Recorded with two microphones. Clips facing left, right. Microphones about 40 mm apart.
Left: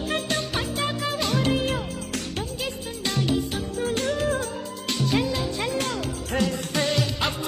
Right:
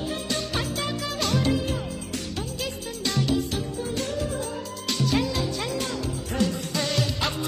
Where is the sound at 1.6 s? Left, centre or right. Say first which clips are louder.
Left 3 dB; left.